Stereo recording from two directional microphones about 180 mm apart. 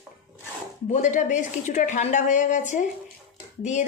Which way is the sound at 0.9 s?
45° left (ahead or behind).